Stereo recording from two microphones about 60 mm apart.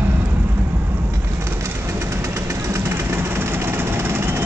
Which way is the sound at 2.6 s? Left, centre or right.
Right.